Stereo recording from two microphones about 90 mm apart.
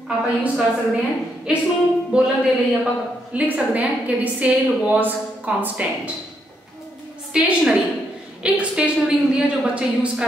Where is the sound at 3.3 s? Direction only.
15° right (ahead or behind).